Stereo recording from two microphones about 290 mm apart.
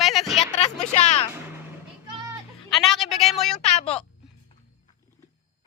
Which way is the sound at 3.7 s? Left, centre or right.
Left.